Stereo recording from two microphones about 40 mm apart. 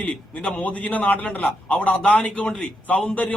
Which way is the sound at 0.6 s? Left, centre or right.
Left.